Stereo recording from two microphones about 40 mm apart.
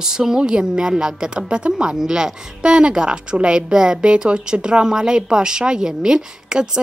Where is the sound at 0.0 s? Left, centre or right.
Centre.